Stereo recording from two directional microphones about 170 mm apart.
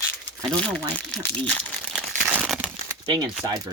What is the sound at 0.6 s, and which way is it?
Speech, 5° left (ahead or behind).